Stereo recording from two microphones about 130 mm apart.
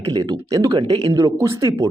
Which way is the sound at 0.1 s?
35° right (ahead or behind).